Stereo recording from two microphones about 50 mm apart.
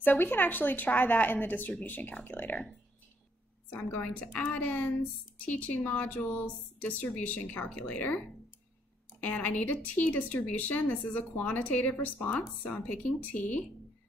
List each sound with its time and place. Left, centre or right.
0.0 s a woman's voice: left
3.7 s a woman's voice: left
9.2 s a woman's voice: left